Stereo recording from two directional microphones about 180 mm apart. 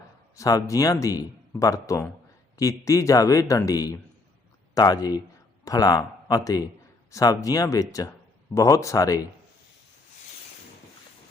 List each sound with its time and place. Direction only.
0.3 s speech: 20° left (ahead or behind)